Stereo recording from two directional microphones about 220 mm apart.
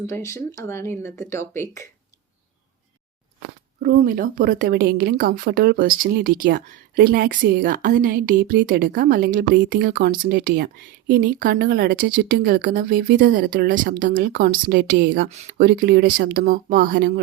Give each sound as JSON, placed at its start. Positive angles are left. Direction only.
{"t": 0.0, "sound": "speech", "side_deg": 10}
{"t": 3.8, "sound": "a woman's voice", "side_deg": -40}